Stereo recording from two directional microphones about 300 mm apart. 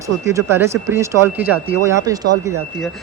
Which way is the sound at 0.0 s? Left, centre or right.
Centre.